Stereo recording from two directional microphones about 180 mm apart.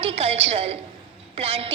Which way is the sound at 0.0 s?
35° right (ahead or behind).